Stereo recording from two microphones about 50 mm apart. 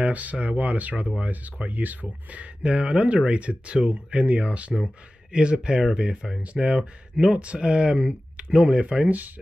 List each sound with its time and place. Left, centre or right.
0.0 s speech: right